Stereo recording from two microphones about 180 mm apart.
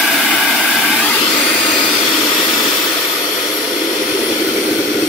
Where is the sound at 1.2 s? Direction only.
30° left (ahead or behind).